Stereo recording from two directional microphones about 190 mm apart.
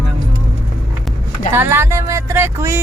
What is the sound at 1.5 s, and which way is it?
Speech, 10° right (ahead or behind).